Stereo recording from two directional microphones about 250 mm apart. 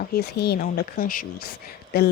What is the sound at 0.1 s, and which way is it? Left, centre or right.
Speech, left.